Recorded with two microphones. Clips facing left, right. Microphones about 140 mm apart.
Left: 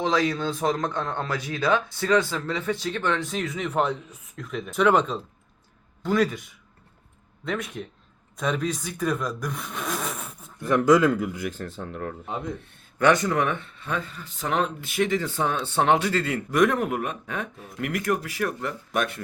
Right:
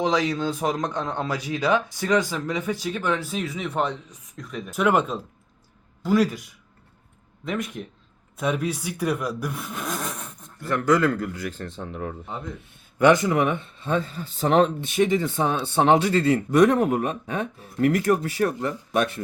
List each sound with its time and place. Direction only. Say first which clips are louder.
0.0 s speech: right 1 dB; 15° right (ahead or behind)
7.4 s speech: right 1 dB; 5° right (ahead or behind)
9.4 s a sound: right 1 dB; 5° right (ahead or behind)
10.6 s speech: left 2 dB; 15° left (ahead or behind)
11.6 s speech: even; 5° left (ahead or behind)
12.2 s speech: left 3 dB; 20° left (ahead or behind)
13.0 s speech: right 3 dB; 15° right (ahead or behind)